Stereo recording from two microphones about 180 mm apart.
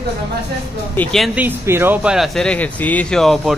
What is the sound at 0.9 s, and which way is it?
Speech, centre (ahead or behind).